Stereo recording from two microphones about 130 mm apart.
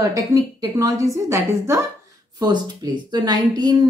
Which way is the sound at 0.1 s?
25° right (ahead or behind).